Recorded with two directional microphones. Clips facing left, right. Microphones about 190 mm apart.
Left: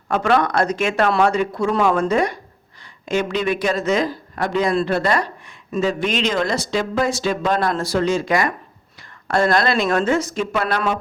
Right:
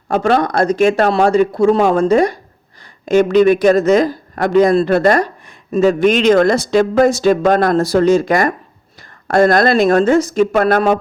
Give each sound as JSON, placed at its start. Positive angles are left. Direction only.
{"t": 0.1, "sound": "a man's voice", "side_deg": -35}